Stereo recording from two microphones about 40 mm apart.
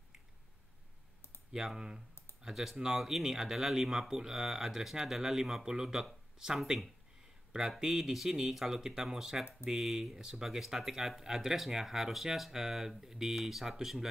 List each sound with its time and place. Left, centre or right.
1.8 s speech: centre
7.8 s speech: centre